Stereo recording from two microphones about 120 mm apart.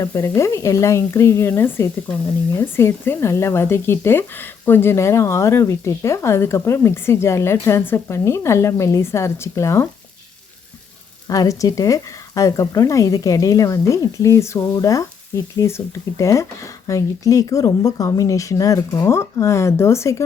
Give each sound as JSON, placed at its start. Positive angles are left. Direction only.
{"t": 0.0, "sound": "speech", "side_deg": 25}
{"t": 11.3, "sound": "speech", "side_deg": 30}